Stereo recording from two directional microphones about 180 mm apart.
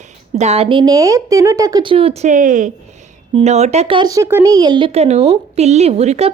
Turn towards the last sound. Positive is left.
turn(degrees=-35)  # may be behind; listen again after turning